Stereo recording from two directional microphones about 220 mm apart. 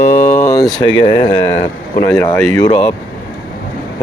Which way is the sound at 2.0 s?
10° left (ahead or behind).